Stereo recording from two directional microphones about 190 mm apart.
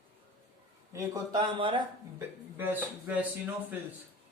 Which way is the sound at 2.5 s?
10° right (ahead or behind).